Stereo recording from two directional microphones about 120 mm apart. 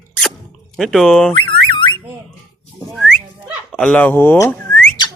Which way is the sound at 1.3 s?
45° left (ahead or behind).